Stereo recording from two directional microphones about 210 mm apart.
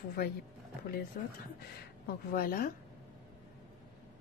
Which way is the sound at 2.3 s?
45° left (ahead or behind).